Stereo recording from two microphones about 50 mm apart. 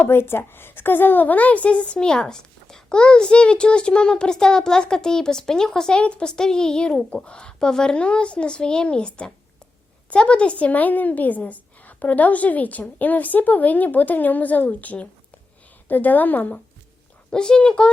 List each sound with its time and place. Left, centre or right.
0.0 s a woman's voice: left
10.7 s a woman's voice: left
17.3 s a woman's voice: centre